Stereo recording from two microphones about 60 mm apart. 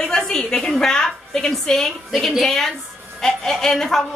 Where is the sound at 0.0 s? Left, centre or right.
Centre.